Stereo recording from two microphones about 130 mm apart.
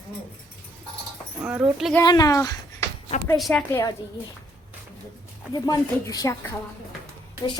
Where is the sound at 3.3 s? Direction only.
Centre (ahead or behind).